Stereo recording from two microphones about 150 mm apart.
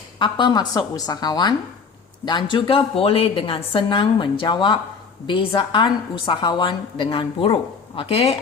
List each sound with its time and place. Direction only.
0.2 s a woman's voice: 30° left (ahead or behind)